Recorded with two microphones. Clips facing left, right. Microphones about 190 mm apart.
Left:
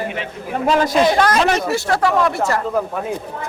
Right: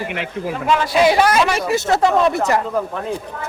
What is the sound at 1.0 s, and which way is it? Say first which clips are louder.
A woman's voice: right 1 dB; 10° right (ahead or behind).